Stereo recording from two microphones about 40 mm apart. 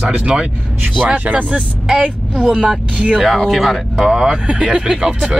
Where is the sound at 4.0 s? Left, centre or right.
Centre.